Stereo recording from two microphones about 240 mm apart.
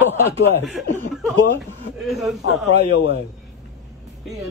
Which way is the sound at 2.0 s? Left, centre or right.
Centre.